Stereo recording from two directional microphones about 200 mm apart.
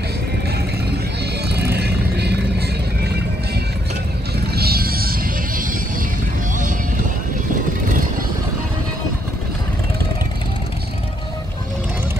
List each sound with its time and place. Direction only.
1.5 s music: 55° right (ahead or behind)
4.6 s music: 50° right (ahead or behind)